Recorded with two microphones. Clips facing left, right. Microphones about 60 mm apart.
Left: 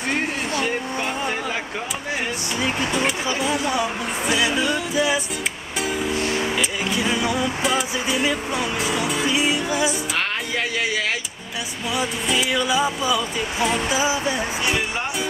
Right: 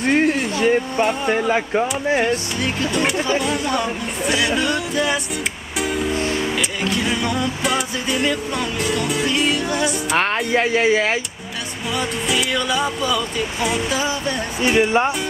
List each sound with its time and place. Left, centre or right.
0.1 s a sound: right
1.3 s speech: right
2.9 s speech: centre
5.8 s music: centre
10.1 s speech: right
11.9 s speech: centre